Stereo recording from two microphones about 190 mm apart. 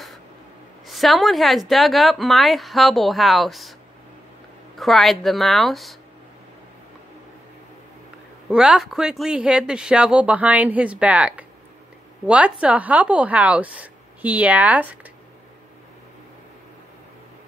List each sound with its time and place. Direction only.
0.8 s a man's voice: centre (ahead or behind)
4.7 s a man's voice: centre (ahead or behind)
8.5 s a man's voice: 5° right (ahead or behind)